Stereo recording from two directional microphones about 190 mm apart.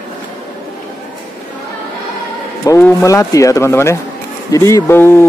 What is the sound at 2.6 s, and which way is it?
Speech, 15° left (ahead or behind).